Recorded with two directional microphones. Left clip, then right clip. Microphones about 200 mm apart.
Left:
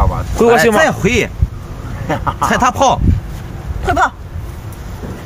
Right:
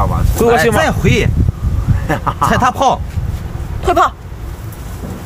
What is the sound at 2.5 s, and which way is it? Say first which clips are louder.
Speech: left 1 dB; 35° left (ahead or behind).